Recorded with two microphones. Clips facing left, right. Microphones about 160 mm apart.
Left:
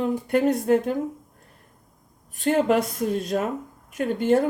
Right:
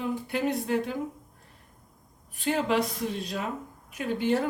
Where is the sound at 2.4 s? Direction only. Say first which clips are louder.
Left 6 dB; 50° left (ahead or behind).